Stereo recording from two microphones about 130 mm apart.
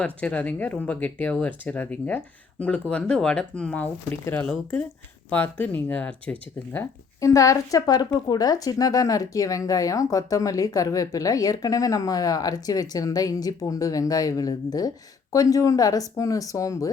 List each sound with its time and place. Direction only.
0.0 s speech: 10° left (ahead or behind)
7.2 s a woman's voice: 25° left (ahead or behind)